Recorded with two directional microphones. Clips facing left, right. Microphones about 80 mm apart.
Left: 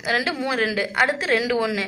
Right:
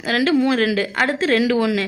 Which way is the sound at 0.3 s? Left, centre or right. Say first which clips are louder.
Right 6 dB; centre.